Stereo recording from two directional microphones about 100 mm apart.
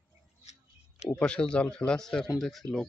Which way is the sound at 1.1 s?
10° left (ahead or behind).